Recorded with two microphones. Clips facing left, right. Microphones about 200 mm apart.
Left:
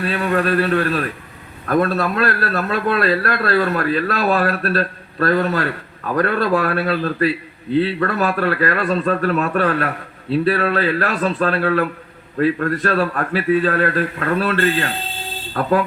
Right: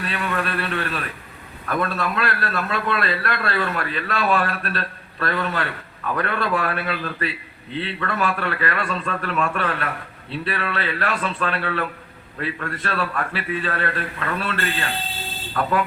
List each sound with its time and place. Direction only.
0.0 s a man's voice: 40° left (ahead or behind)